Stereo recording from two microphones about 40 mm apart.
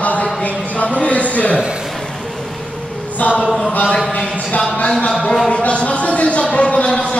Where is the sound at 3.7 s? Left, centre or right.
Left.